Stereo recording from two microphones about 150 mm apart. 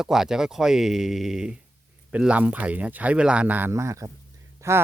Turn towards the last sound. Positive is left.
turn(degrees=-20)  # may be behind; listen again after turning